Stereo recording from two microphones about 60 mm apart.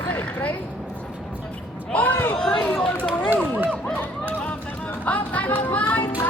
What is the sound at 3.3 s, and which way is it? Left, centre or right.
Run, right.